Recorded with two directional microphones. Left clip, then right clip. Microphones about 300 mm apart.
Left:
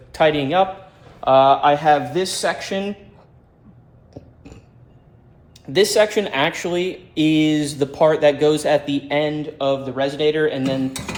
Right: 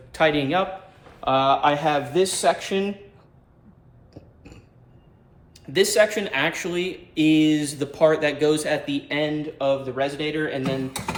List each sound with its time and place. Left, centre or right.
0.1 s a man's voice: centre
4.1 s a sound: centre
5.5 s speech: centre